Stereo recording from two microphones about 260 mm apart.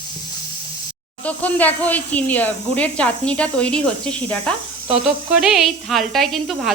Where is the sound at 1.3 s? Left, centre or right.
Centre.